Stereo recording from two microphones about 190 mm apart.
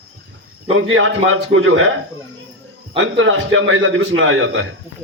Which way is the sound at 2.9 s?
90° right.